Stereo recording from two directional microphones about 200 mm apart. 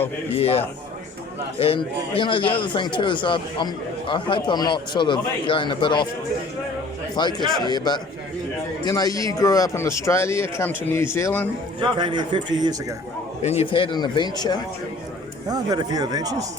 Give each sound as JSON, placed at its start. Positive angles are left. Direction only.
{"t": 0.3, "sound": "a man's voice", "side_deg": 30}
{"t": 7.2, "sound": "a man's voice", "side_deg": 20}
{"t": 11.8, "sound": "speech", "side_deg": -25}
{"t": 13.4, "sound": "a man's voice", "side_deg": 30}
{"t": 15.4, "sound": "speech", "side_deg": -20}